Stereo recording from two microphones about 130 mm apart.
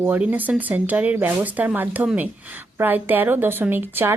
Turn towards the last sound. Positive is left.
turn(degrees=-15)  # may be behind; listen again after turning